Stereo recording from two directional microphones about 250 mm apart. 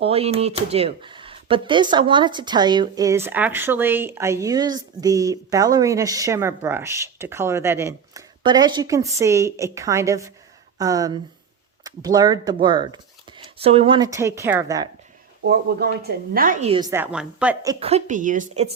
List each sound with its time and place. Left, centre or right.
0.0 s speech: right
15.4 s a woman's voice: right